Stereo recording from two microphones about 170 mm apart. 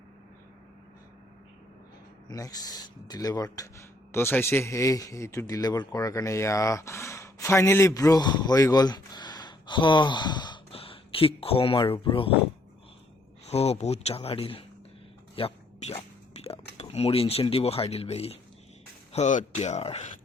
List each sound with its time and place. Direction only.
2.3 s speech: 20° left (ahead or behind)
13.5 s speech: 40° left (ahead or behind)
15.4 s a sound: 35° left (ahead or behind)
16.7 s speech: 35° left (ahead or behind)